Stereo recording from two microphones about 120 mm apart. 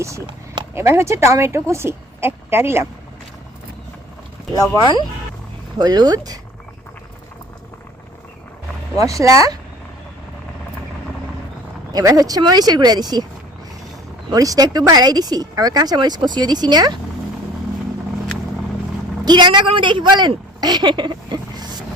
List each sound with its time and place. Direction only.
0.7 s speech: 20° right (ahead or behind)
4.8 s speech: 40° left (ahead or behind)
5.7 s speech: 35° right (ahead or behind)
9.0 s speech: 25° right (ahead or behind)
11.9 s speech: 30° right (ahead or behind)
14.3 s speech: 30° right (ahead or behind)
19.2 s a woman's voice: 40° right (ahead or behind)